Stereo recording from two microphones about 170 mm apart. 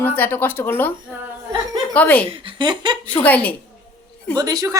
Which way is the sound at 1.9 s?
10° left (ahead or behind).